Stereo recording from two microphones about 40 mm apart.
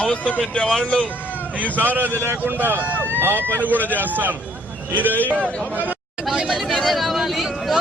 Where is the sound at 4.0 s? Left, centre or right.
Right.